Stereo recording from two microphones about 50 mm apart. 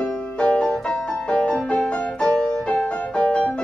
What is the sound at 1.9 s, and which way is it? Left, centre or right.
Music, left.